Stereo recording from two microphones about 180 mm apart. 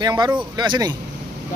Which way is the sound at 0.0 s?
20° right (ahead or behind).